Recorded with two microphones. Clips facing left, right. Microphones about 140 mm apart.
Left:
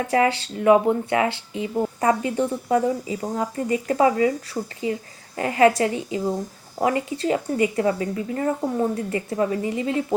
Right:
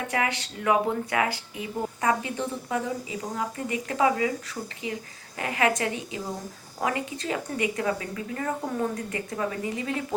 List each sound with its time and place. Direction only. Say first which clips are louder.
0.1 s speech: left 10 dB; 30° left (ahead or behind)
5.4 s speech: left 8 dB; 30° left (ahead or behind)